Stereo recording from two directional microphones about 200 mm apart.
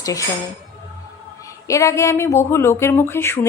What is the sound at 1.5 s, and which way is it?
Speech, 15° left (ahead or behind).